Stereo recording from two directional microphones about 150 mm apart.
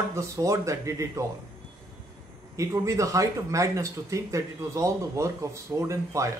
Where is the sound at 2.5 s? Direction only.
20° right (ahead or behind).